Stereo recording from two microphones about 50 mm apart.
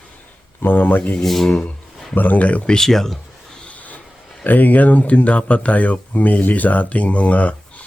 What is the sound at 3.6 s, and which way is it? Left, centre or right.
Vehicle, left.